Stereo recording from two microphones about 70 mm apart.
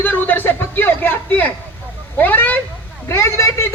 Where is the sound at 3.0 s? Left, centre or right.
Left.